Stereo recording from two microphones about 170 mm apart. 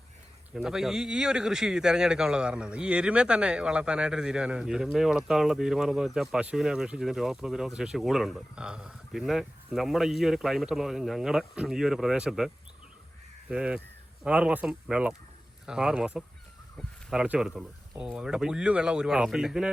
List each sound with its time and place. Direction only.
0.5 s speech: 5° right (ahead or behind)
13.5 s speech: 5° right (ahead or behind)